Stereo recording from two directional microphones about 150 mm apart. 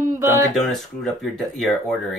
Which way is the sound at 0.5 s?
Centre (ahead or behind).